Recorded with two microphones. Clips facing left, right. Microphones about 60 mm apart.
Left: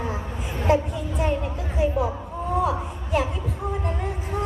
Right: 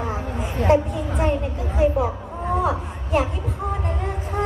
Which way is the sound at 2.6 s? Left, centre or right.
Right.